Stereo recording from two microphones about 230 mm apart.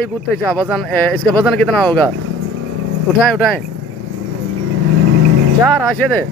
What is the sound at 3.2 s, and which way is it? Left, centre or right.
Speech, centre.